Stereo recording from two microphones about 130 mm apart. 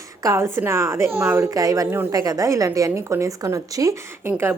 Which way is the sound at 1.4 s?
25° right (ahead or behind).